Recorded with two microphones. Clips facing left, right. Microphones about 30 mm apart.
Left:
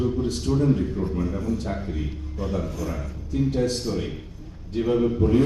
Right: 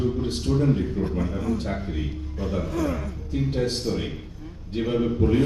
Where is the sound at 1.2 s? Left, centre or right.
Right.